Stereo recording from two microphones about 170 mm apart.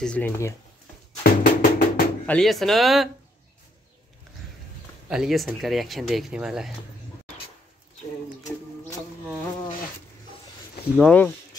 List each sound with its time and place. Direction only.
0.0 s speech: 5° left (ahead or behind)
1.2 s music: 60° left (ahead or behind)
2.2 s speech: 5° left (ahead or behind)
5.1 s speech: centre (ahead or behind)
11.0 s speech: 10° left (ahead or behind)